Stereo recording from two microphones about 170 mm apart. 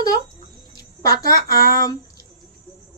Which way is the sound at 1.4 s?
60° right (ahead or behind).